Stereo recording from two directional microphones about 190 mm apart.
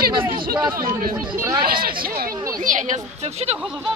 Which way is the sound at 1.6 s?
50° right (ahead or behind).